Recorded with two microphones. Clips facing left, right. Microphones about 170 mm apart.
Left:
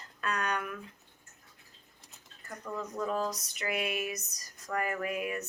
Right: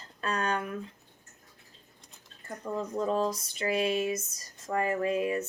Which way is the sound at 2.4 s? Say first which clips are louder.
Right 5 dB; 25° right (ahead or behind).